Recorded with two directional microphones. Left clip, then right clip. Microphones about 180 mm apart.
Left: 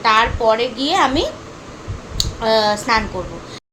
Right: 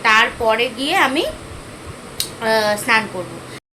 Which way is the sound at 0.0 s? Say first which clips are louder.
Even; 10° left (ahead or behind).